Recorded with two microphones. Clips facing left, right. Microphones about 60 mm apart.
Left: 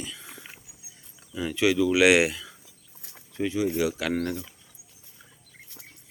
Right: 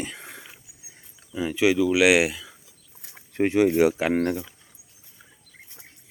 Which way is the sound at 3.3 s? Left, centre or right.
Right.